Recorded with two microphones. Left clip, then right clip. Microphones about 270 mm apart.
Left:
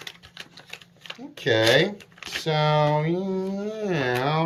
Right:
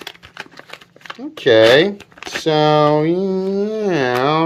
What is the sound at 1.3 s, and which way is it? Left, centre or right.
Speech, centre.